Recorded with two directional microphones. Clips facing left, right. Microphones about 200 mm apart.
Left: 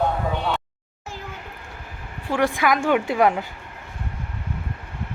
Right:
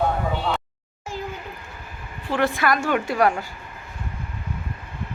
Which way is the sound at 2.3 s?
15° left (ahead or behind).